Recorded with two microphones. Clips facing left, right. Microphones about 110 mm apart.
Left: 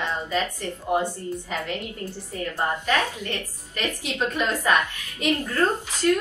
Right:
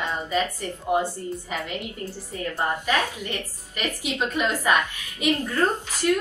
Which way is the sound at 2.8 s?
15° right (ahead or behind).